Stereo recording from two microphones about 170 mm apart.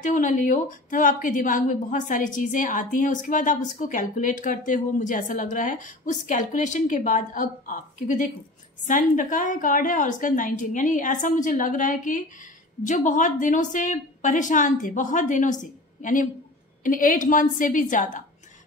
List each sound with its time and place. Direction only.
0.0 s a woman's voice: 50° left (ahead or behind)